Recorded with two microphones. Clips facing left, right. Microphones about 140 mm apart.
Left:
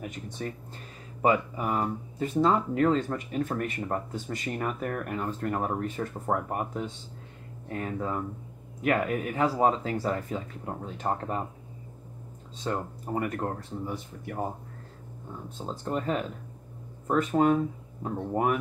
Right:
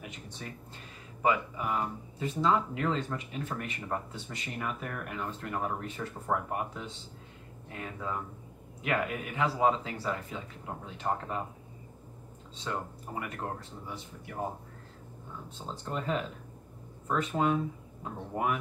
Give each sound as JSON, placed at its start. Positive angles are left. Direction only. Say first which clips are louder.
{"t": 0.0, "sound": "speech", "louder": "left 8 dB", "side_deg": 50}
{"t": 12.5, "sound": "speech", "louder": "left 5 dB", "side_deg": 45}
{"t": 15.5, "sound": "speech", "louder": "left 5 dB", "side_deg": 45}